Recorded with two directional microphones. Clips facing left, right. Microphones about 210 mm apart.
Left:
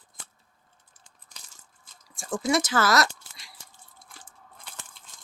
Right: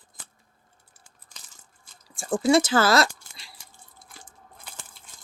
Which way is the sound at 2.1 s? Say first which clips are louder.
Right 6 dB; 30° right (ahead or behind).